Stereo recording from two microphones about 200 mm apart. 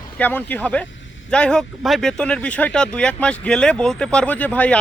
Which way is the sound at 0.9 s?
70° left (ahead or behind).